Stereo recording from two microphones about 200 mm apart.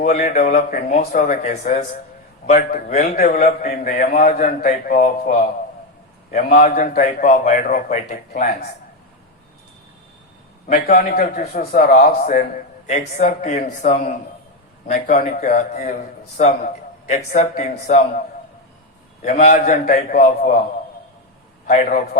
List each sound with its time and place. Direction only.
0.0 s a man's voice: 35° left (ahead or behind)
6.3 s a man's voice: 40° left (ahead or behind)
10.7 s a man's voice: 45° left (ahead or behind)
19.2 s a man's voice: 35° left (ahead or behind)
21.7 s a man's voice: 40° left (ahead or behind)